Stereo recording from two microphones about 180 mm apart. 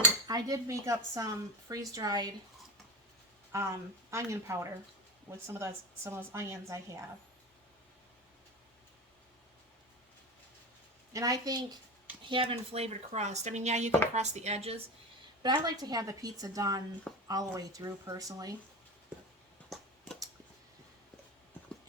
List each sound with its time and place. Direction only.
0.3 s a woman's voice: 20° right (ahead or behind)
3.5 s a woman's voice: 15° right (ahead or behind)
11.1 s a woman's voice: 20° right (ahead or behind)
12.3 s speech: 30° right (ahead or behind)
15.4 s a woman's voice: 25° right (ahead or behind)